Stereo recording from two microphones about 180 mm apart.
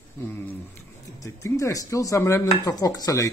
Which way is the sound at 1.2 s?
15° left (ahead or behind).